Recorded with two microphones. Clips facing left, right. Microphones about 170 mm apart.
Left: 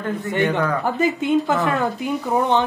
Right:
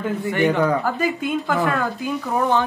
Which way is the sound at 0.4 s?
15° right (ahead or behind).